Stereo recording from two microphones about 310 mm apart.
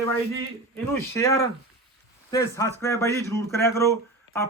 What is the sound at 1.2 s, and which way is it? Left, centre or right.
A man's voice, centre.